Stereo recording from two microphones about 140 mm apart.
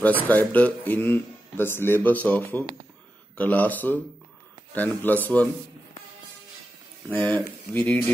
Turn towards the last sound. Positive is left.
turn(degrees=10)  # may be behind; listen again after turning